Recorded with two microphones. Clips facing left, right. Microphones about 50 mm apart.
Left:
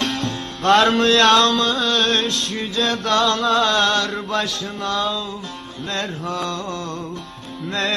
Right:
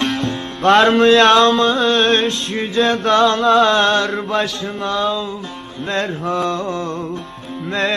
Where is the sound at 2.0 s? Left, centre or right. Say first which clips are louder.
Right 4 dB; centre.